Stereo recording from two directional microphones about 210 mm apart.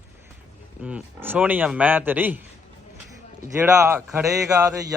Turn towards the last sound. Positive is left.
turn(degrees=-15)  # may be behind; listen again after turning